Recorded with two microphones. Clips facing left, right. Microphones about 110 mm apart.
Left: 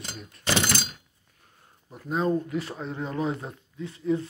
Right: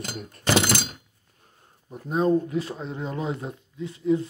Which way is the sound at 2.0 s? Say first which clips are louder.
Right 4 dB; 25° right (ahead or behind).